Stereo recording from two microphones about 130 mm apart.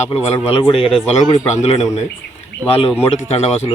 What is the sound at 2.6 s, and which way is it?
A man's voice, 50° left (ahead or behind).